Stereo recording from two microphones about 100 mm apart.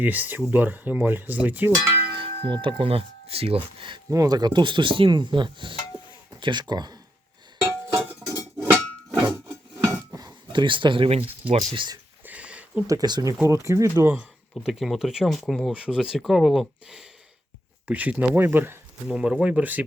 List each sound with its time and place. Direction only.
0.0 s cutlery: 15° right (ahead or behind)
2.1 s speech: 60° right (ahead or behind)
4.1 s speech: 40° right (ahead or behind)
8.3 s cowbell: 35° right (ahead or behind)
9.8 s speech: 35° right (ahead or behind); by 11.9 s 65° right (ahead or behind)
12.2 s a sound: 15° right (ahead or behind)
12.9 s speech: 40° right (ahead or behind)
13.4 s cutlery: 30° right (ahead or behind)
14.5 s speech: centre (ahead or behind)
18.3 s cutlery: 25° right (ahead or behind)
19.0 s speech: 10° right (ahead or behind)